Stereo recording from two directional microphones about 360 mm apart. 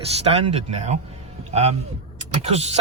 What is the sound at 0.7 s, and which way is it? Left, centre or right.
A man's voice, centre.